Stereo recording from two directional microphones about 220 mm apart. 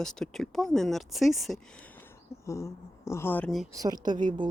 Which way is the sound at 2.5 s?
15° left (ahead or behind).